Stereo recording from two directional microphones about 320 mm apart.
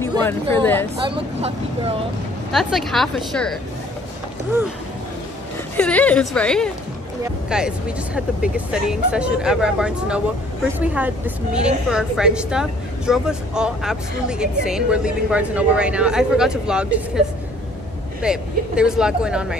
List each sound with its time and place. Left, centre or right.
0.2 s a woman's voice: centre
1.0 s speech: centre
2.5 s speech: centre
5.8 s speech: centre
18.2 s speech: centre